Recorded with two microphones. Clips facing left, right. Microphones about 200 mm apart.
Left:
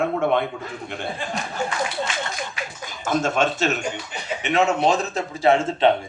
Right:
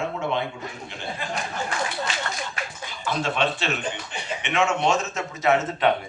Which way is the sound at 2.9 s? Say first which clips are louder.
Left 5 dB; 45° left (ahead or behind).